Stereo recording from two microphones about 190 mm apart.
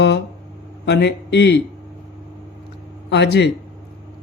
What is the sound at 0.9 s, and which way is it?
Speech, 60° left (ahead or behind).